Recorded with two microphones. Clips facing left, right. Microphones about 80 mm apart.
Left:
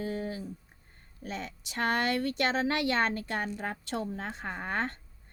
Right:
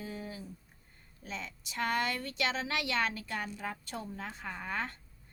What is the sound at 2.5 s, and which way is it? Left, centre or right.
Speech, left.